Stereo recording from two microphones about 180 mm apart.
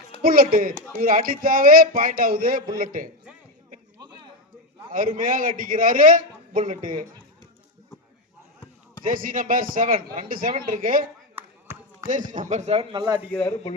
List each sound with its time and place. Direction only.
0.2 s speech: 55° right (ahead or behind)
4.9 s speech: 50° right (ahead or behind)
9.0 s speech: 50° right (ahead or behind)
11.3 s chop: 15° right (ahead or behind)
12.0 s speech: 45° right (ahead or behind); by 13.2 s 20° right (ahead or behind)